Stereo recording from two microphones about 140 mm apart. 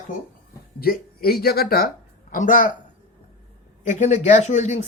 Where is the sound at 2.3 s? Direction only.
70° left (ahead or behind).